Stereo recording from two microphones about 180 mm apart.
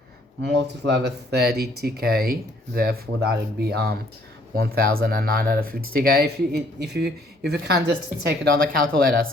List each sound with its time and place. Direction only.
0.4 s speech: 70° right (ahead or behind)
8.5 s speech: 55° right (ahead or behind)